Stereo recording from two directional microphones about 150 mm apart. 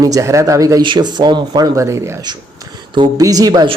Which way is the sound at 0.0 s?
25° right (ahead or behind).